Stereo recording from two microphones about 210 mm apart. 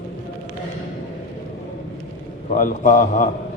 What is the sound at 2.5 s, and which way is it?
Speech, 40° left (ahead or behind).